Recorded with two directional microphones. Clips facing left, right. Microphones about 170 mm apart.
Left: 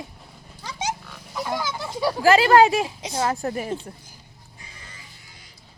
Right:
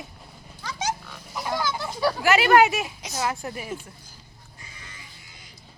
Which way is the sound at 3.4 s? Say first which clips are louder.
Left 6 dB; 40° left (ahead or behind).